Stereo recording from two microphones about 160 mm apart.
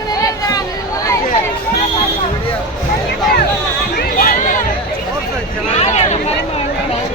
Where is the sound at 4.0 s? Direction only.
65° left (ahead or behind).